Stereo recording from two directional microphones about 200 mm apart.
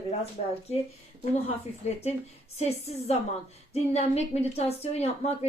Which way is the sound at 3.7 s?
30° left (ahead or behind).